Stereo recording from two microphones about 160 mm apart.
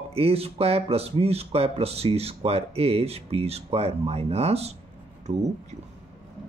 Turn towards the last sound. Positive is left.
turn(degrees=-40)  # may be behind; listen again after turning